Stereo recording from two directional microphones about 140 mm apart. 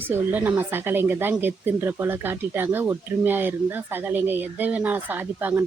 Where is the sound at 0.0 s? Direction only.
15° right (ahead or behind).